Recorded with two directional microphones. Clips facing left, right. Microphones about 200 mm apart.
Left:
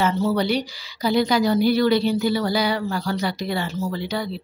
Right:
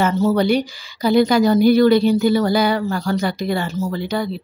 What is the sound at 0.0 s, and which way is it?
Speech, 45° right (ahead or behind).